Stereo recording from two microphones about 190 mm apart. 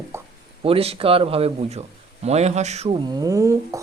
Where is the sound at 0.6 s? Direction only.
30° right (ahead or behind).